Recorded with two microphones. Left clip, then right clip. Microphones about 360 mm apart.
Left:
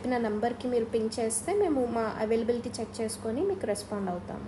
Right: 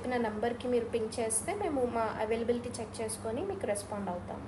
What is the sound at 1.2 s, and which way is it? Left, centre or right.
A woman's voice, left.